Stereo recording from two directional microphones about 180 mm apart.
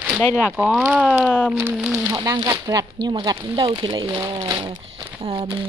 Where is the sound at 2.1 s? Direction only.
20° right (ahead or behind).